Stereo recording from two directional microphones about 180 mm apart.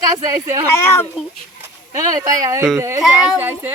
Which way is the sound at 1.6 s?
20° right (ahead or behind).